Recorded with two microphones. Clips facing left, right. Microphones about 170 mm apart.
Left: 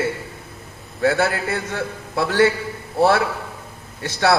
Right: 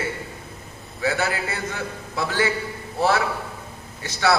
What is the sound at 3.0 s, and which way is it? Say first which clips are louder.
Speech: left 4 dB; 55° left (ahead or behind).